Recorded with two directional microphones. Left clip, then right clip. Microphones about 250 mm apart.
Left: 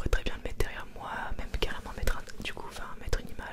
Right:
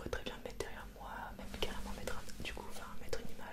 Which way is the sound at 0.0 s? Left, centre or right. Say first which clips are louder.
Left 7 dB; left.